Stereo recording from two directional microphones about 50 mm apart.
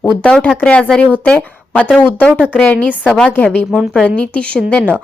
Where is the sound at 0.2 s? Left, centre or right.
Centre.